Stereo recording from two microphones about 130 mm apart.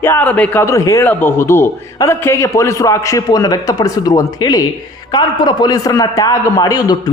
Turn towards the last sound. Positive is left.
turn(degrees=30)  # may be behind; listen again after turning